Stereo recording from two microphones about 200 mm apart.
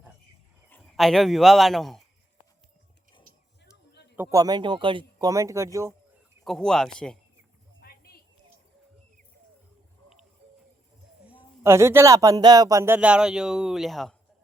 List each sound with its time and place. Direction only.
0.8 s a man's voice: centre (ahead or behind)
4.2 s speech: 15° right (ahead or behind)
6.4 s speech: centre (ahead or behind)
7.8 s a sound: 50° left (ahead or behind)
11.6 s speech: 15° right (ahead or behind)